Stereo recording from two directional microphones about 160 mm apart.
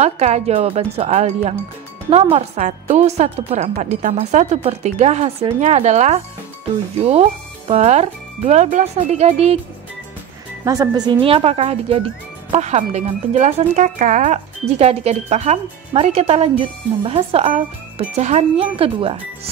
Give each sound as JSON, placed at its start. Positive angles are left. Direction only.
{"t": 0.0, "sound": "a woman's voice", "side_deg": -45}
{"t": 10.6, "sound": "speech", "side_deg": -20}